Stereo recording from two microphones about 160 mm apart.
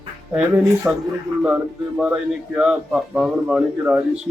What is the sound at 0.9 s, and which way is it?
A man's voice, 15° right (ahead or behind).